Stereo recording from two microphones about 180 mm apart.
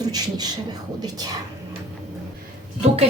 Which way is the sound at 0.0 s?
20° right (ahead or behind).